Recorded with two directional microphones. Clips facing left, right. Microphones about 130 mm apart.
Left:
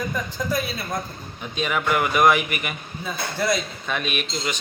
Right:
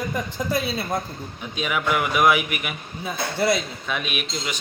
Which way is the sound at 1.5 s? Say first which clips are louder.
Left 1 dB; 5° right (ahead or behind).